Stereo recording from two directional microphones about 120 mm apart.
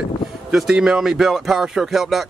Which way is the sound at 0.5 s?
5° right (ahead or behind).